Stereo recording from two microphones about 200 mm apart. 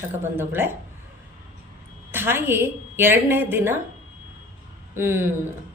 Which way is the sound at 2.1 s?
10° right (ahead or behind).